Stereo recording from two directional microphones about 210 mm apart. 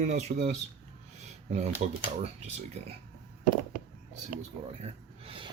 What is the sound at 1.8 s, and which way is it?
Speech, 35° right (ahead or behind).